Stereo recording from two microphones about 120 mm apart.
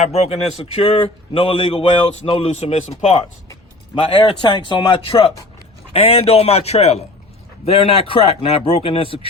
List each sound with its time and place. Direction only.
0.0 s a man's voice: 60° left (ahead or behind)
3.9 s a man's voice: 45° left (ahead or behind)